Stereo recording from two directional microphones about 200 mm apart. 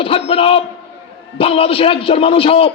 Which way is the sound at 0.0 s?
30° left (ahead or behind).